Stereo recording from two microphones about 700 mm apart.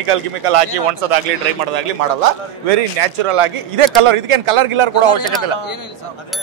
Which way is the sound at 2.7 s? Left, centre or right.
Right.